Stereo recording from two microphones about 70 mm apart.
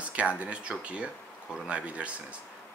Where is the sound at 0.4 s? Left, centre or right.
Centre.